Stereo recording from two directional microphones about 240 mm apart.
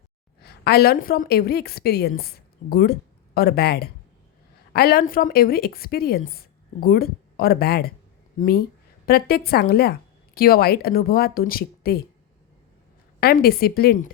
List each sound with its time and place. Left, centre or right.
0.4 s a woman's voice: left
13.1 s a woman's voice: left